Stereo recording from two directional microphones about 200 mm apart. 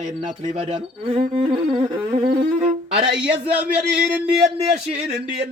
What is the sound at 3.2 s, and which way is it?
Speech, 5° right (ahead or behind).